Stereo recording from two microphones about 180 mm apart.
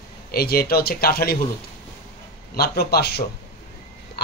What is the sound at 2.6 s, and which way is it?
Speech, 60° left (ahead or behind).